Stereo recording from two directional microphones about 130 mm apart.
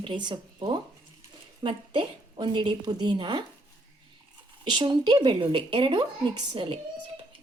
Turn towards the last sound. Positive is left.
turn(degrees=-40)  # may be behind; listen again after turning